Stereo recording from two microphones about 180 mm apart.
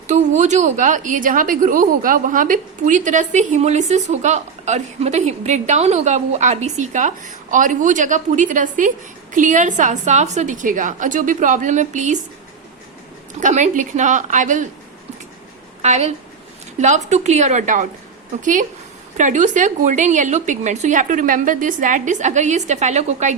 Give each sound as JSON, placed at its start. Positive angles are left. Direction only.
{"t": 0.1, "sound": "a woman's voice", "side_deg": -40}
{"t": 13.4, "sound": "a woman's voice", "side_deg": -40}
{"t": 15.8, "sound": "a woman's voice", "side_deg": -40}
{"t": 19.1, "sound": "a woman's voice", "side_deg": -45}